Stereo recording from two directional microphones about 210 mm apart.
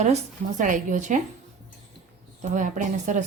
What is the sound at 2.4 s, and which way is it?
Speech, 35° right (ahead or behind).